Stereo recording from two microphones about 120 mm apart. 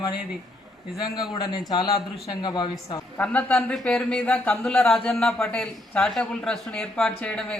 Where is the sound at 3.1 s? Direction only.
10° left (ahead or behind).